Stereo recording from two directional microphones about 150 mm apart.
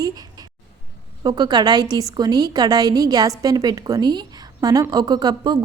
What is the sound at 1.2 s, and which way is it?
A woman's voice, 25° right (ahead or behind).